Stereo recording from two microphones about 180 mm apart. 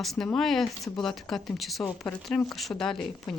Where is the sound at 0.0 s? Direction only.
Centre (ahead or behind).